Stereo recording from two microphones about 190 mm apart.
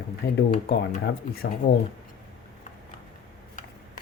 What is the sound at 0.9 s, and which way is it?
Speech, 55° left (ahead or behind).